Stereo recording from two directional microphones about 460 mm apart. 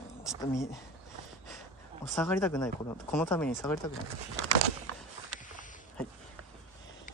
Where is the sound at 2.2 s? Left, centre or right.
Centre.